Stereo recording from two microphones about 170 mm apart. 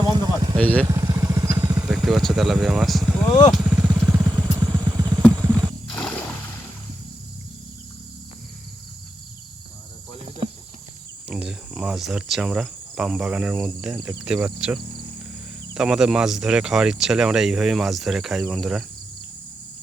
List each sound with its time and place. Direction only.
0.1 s a sound: 25° right (ahead or behind)
0.5 s speech: 10° left (ahead or behind)
0.9 s vehicle: 20° right (ahead or behind)
1.9 s speech: centre (ahead or behind)
3.5 s vehicle: 5° right (ahead or behind)
4.4 s vehicle: 20° right (ahead or behind)
5.4 s wild animals: 20° right (ahead or behind)
5.9 s wild animals: 5° left (ahead or behind)
11.3 s cricket: 5° right (ahead or behind)
14.3 s speech: 5° right (ahead or behind)